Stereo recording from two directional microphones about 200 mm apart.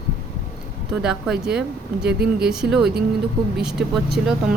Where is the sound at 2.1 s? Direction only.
55° right (ahead or behind).